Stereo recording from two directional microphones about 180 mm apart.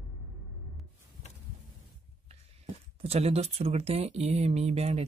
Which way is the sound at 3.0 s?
35° right (ahead or behind).